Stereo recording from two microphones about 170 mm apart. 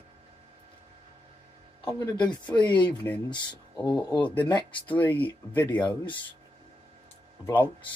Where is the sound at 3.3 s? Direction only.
25° left (ahead or behind).